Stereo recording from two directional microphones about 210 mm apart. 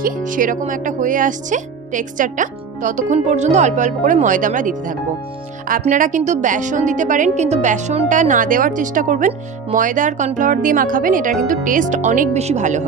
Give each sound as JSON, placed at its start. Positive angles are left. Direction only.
{"t": 0.0, "sound": "a woman's voice", "side_deg": -40}